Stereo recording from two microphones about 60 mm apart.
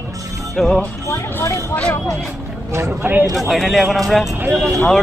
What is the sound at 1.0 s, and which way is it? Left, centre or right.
Speech, left.